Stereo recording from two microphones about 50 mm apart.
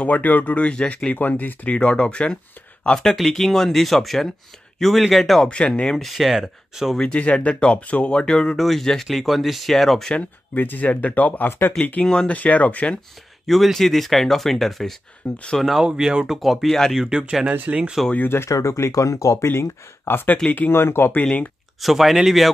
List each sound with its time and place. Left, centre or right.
0.0 s speech: left; by 5.4 s centre
5.4 s speech: centre
5.9 s speech: centre
7.0 s speech: left; by 10.0 s centre
10.5 s speech: left
13.5 s speech: centre
15.2 s speech: centre
16.0 s speech: centre
16.3 s speech: centre
16.9 s speech: centre
18.3 s speech: left
20.4 s speech: left
20.7 s speech: left
21.8 s speech: centre